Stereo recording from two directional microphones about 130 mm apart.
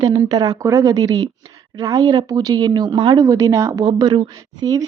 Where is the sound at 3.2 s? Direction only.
25° right (ahead or behind).